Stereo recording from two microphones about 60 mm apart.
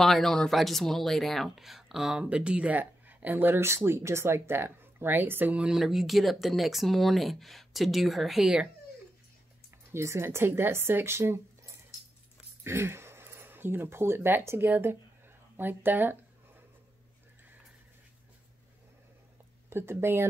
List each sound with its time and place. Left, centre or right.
0.0 s speech: centre; by 3.6 s right
3.6 s speech: right
5.7 s speech: centre
9.9 s speech: right
14.7 s a sound: right
19.7 s speech: right